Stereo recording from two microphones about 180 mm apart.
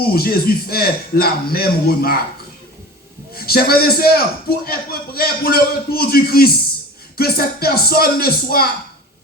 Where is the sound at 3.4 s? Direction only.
55° left (ahead or behind).